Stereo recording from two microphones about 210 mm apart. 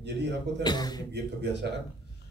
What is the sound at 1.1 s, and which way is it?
Speech, 55° right (ahead or behind).